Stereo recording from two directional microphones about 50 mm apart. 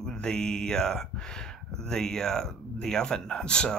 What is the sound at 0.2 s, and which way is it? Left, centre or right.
Speech, centre.